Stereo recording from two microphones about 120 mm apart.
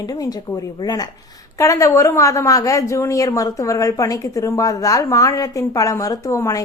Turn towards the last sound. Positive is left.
turn(degrees=25)  # may be behind; listen again after turning